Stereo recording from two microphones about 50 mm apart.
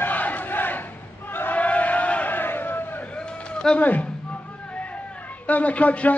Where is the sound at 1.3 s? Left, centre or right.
Left.